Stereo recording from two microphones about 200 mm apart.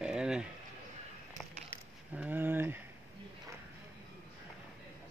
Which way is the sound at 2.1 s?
10° right (ahead or behind).